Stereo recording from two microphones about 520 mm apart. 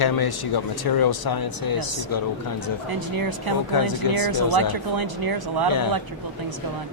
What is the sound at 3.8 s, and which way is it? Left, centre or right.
Speech, left.